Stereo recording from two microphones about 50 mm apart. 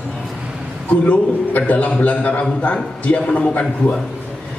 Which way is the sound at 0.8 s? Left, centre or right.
Left.